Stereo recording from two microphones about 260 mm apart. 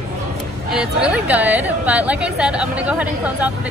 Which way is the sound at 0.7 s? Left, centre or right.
Centre.